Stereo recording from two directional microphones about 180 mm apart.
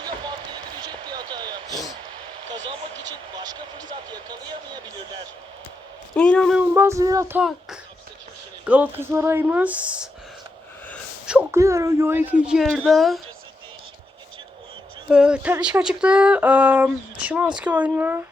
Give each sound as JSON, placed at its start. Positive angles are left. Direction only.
{"t": 0.8, "sound": "a sound", "side_deg": -25}
{"t": 2.5, "sound": "vehicle", "side_deg": -90}
{"t": 3.3, "sound": "a sound", "side_deg": -20}
{"t": 4.1, "sound": "speech", "side_deg": -25}
{"t": 6.1, "sound": "speech", "side_deg": 5}
{"t": 6.6, "sound": "speech", "side_deg": -15}
{"t": 8.6, "sound": "speech", "side_deg": -10}
{"t": 11.3, "sound": "speech", "side_deg": -10}
{"t": 15.1, "sound": "speech", "side_deg": -5}